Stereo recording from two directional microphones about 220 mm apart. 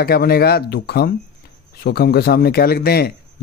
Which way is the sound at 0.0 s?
45° left (ahead or behind).